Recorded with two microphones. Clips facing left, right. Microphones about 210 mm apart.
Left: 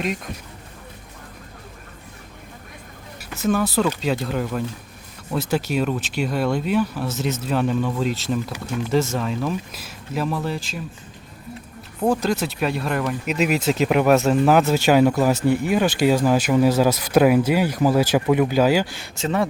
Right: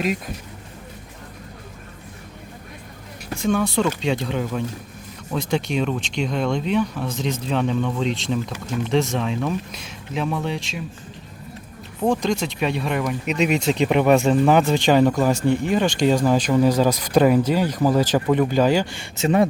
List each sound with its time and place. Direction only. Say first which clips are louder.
3.3 s speech: even; 5° left (ahead or behind)
11.9 s speech: even; 5° left (ahead or behind)
19.2 s speech: right 4 dB; 20° right (ahead or behind)